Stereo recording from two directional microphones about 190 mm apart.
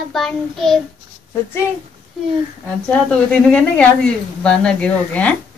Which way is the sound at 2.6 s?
5° left (ahead or behind).